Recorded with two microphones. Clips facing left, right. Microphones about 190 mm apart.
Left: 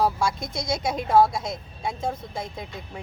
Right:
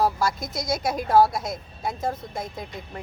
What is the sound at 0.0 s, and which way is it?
Speech, 5° right (ahead or behind).